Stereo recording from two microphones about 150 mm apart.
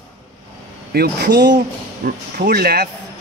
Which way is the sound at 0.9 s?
90° right.